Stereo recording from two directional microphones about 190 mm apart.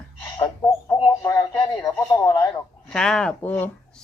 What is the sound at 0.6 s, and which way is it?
Speech, 5° left (ahead or behind).